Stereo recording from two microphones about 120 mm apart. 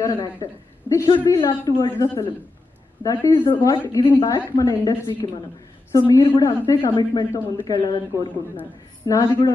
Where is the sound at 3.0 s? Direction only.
30° left (ahead or behind).